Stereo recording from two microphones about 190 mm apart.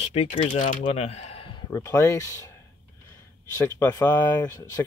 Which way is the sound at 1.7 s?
15° left (ahead or behind).